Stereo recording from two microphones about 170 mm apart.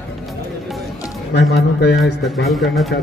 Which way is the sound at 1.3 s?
80° left.